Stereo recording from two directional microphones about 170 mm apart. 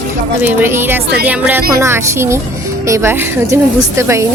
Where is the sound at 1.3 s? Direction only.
10° right (ahead or behind).